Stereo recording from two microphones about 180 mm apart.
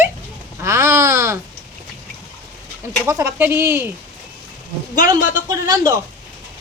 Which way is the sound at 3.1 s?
15° right (ahead or behind).